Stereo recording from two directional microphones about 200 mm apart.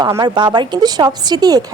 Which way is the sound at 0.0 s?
20° right (ahead or behind).